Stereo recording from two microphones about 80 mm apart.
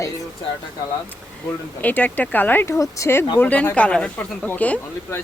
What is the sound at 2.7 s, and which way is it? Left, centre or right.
Speech, left.